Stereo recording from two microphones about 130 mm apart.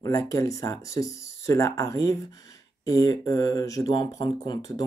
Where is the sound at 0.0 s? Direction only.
25° left (ahead or behind).